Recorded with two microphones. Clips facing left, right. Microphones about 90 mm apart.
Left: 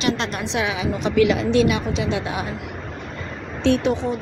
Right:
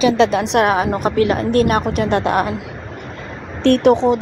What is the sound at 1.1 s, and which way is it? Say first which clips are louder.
A woman's voice: left 1 dB; 40° right (ahead or behind).